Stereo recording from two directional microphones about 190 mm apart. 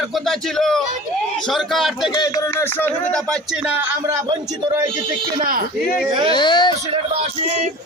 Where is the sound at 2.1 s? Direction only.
20° left (ahead or behind); by 3.6 s 5° left (ahead or behind).